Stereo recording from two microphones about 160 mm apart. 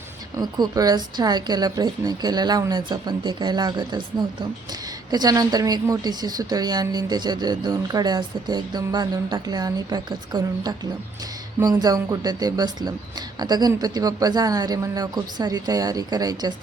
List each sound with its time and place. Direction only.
0.3 s a woman's voice: 25° right (ahead or behind)
5.1 s a woman's voice: 25° right (ahead or behind)